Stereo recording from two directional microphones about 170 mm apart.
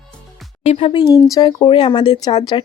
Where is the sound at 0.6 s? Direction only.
35° left (ahead or behind).